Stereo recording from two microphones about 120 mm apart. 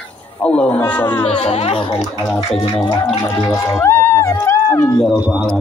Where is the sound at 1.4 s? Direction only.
60° left (ahead or behind).